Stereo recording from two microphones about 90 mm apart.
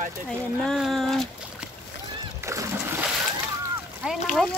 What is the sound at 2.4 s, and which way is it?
Splash, 35° right (ahead or behind).